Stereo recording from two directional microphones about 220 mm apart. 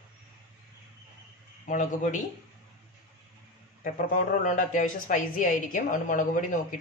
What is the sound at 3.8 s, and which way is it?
A woman's voice, 35° left (ahead or behind).